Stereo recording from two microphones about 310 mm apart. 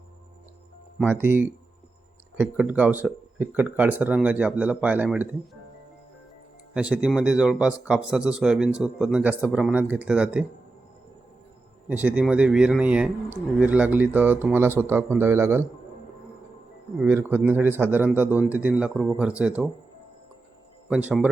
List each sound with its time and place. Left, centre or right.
0.9 s speech: centre
6.7 s speech: centre
11.9 s speech: centre
17.0 s speech: centre
20.9 s speech: centre